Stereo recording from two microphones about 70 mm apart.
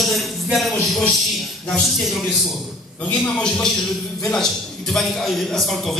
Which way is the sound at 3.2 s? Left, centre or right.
Centre.